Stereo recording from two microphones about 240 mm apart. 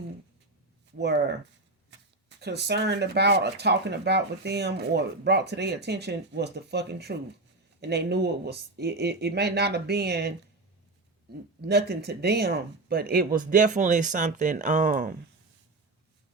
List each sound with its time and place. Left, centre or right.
0.9 s speech: right
2.4 s speech: right
11.6 s speech: right